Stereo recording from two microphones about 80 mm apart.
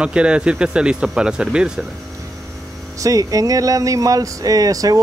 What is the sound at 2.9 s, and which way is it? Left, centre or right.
Speech, right.